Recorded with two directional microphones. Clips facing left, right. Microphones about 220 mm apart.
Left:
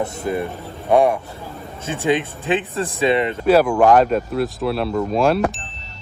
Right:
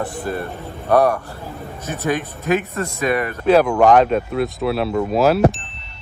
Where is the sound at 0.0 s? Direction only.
20° left (ahead or behind).